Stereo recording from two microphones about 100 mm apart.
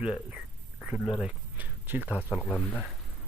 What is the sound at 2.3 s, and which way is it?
Speech, 15° left (ahead or behind).